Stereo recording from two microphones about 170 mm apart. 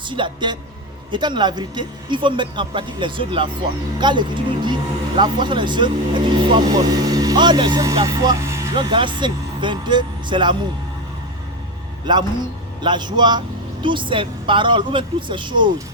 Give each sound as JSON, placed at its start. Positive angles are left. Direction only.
{"t": 0.1, "sound": "speech", "side_deg": -25}
{"t": 12.1, "sound": "speech", "side_deg": -25}